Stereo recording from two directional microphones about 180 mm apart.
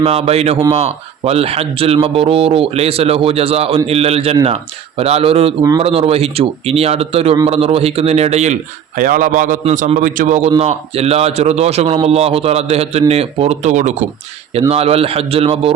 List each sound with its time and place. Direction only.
0.0 s a man's voice: 35° right (ahead or behind)
9.0 s a man's voice: 50° right (ahead or behind); by 15.7 s 35° right (ahead or behind)